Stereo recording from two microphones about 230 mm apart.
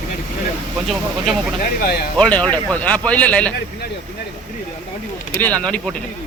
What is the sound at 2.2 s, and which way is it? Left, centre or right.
Speech, centre.